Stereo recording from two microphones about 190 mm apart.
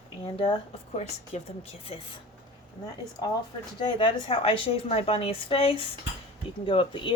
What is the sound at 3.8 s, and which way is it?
A woman's voice, 25° left (ahead or behind).